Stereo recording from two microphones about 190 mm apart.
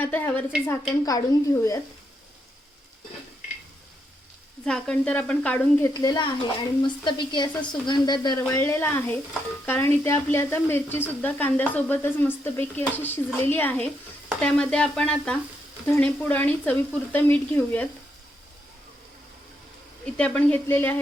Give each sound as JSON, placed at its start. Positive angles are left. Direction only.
{"t": 0.0, "sound": "speech", "side_deg": 10}
{"t": 0.7, "sound": "speech", "side_deg": 20}
{"t": 4.6, "sound": "speech", "side_deg": 5}
{"t": 6.0, "sound": "speech", "side_deg": 20}
{"t": 8.4, "sound": "speech", "side_deg": 10}
{"t": 14.3, "sound": "stir", "side_deg": 5}
{"t": 15.9, "sound": "speech", "side_deg": 10}
{"t": 20.1, "sound": "speech", "side_deg": 5}